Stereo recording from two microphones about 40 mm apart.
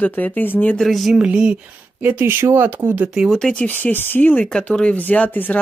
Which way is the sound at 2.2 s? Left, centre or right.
Right.